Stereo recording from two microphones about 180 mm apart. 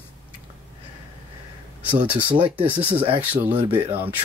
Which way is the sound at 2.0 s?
10° right (ahead or behind).